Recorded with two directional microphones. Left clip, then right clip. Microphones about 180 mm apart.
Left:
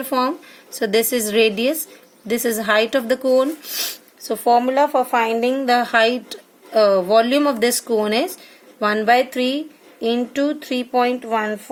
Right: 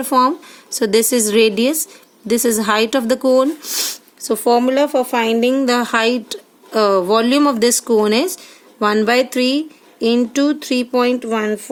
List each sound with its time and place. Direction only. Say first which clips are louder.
0.1 s a woman's voice: right 6 dB; 65° right (ahead or behind)